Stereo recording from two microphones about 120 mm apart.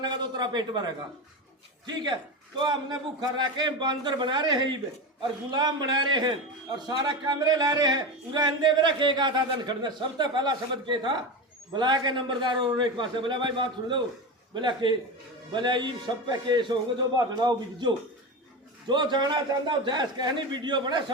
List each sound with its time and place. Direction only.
0.0 s speech: 35° right (ahead or behind)
2.6 s speech: 35° right (ahead or behind)